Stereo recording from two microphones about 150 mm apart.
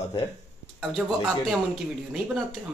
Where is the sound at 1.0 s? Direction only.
10° right (ahead or behind).